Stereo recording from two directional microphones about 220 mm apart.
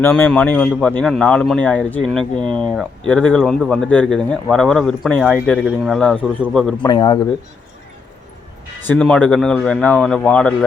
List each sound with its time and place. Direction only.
0.0 s speech: 10° left (ahead or behind)
6.8 s a man's voice: 20° left (ahead or behind)
8.9 s speech: 5° left (ahead or behind)